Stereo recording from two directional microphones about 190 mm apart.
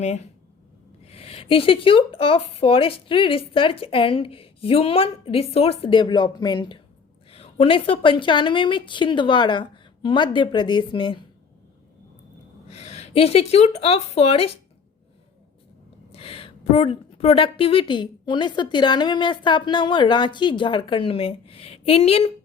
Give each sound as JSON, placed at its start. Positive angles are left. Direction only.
{"t": 0.0, "sound": "a woman's voice", "side_deg": 35}
{"t": 12.6, "sound": "a woman's voice", "side_deg": 35}
{"t": 16.1, "sound": "a woman's voice", "side_deg": 30}